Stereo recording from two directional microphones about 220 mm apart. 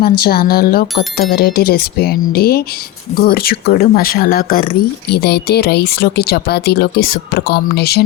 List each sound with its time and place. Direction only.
0.0 s speech: 45° left (ahead or behind)